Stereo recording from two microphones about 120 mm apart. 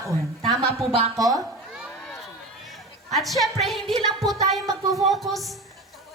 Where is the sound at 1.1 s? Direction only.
30° right (ahead or behind).